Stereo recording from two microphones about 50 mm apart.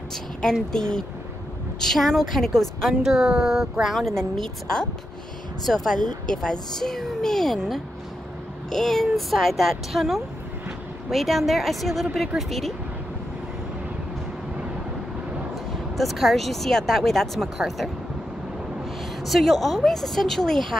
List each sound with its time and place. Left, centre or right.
0.4 s speech: centre
2.9 s speech: centre
4.1 s speech: centre
15.5 s speech: centre
19.2 s speech: centre